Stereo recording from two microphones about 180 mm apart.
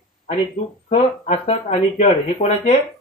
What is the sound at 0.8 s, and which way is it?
Speech, 35° left (ahead or behind).